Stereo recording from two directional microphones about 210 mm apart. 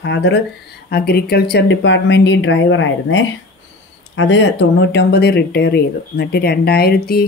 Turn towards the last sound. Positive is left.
turn(degrees=45)  # may be behind; listen again after turning